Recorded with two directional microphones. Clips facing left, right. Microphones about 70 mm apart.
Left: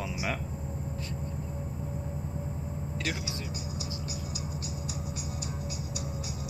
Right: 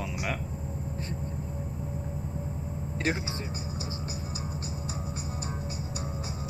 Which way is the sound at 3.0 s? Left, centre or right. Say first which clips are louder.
Right 6 dB; right.